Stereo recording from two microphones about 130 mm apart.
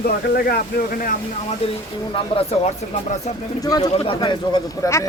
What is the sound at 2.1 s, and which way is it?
Speech, 45° left (ahead or behind).